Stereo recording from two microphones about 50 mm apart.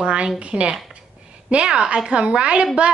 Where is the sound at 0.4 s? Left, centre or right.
Right.